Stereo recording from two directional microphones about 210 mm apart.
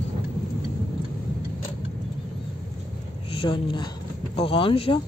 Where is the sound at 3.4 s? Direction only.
25° left (ahead or behind).